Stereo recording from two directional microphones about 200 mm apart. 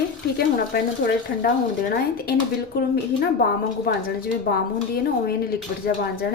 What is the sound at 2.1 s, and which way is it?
A woman's voice, 50° left (ahead or behind).